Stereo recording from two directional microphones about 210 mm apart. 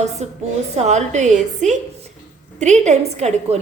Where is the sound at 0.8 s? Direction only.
35° right (ahead or behind).